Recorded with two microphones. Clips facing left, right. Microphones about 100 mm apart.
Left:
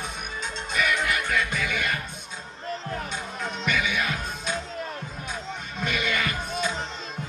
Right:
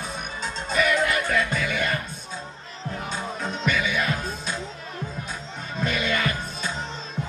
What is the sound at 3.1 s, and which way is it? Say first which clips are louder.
Music: right 2 dB; 35° right (ahead or behind).